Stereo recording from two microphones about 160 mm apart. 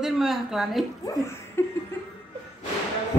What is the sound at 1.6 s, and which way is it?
Laughter, 15° left (ahead or behind).